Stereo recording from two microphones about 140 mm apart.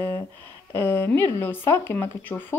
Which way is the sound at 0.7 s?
15° left (ahead or behind).